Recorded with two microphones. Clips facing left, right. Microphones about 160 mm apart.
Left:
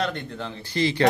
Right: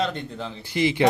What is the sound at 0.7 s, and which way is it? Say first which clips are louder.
Speech: right 1 dB; 15° right (ahead or behind).